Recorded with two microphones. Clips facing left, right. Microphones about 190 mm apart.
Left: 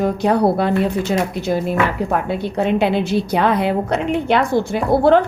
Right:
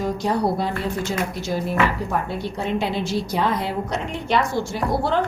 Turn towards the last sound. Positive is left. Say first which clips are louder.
# left 9 dB
turn(degrees=60)  # may be behind; listen again after turning